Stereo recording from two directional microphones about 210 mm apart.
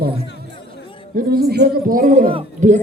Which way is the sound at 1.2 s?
45° right (ahead or behind).